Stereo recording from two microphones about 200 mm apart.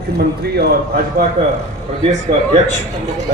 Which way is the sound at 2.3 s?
40° right (ahead or behind).